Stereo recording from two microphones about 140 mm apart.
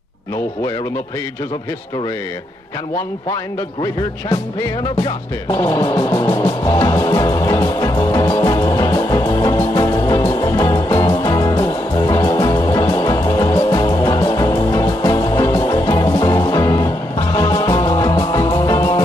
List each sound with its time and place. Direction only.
3.8 s music: 30° left (ahead or behind)
9.3 s music: 30° left (ahead or behind)